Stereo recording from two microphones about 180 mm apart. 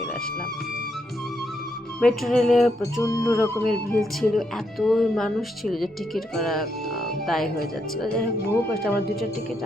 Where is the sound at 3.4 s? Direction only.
15° left (ahead or behind).